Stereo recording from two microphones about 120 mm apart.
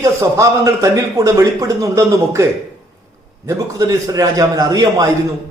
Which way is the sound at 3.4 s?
30° right (ahead or behind).